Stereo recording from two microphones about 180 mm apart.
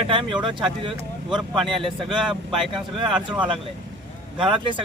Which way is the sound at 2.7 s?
30° right (ahead or behind).